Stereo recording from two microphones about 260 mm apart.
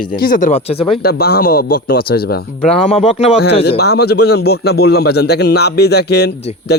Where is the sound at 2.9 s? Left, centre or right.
Left.